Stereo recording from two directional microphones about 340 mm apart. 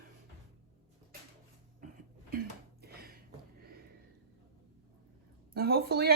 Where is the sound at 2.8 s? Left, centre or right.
Right.